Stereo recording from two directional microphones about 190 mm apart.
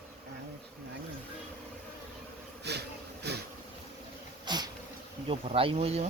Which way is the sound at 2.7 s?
60° right (ahead or behind).